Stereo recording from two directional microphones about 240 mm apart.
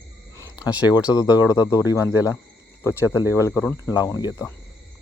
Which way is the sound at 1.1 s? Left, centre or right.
Centre.